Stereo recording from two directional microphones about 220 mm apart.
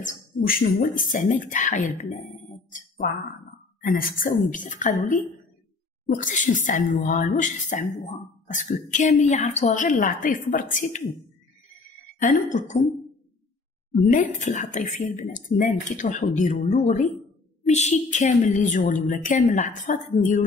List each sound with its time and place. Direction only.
0.0 s a woman's voice: 40° left (ahead or behind)
3.8 s a woman's voice: 40° left (ahead or behind)
12.2 s a woman's voice: 35° left (ahead or behind)
14.4 s a woman's voice: 30° left (ahead or behind)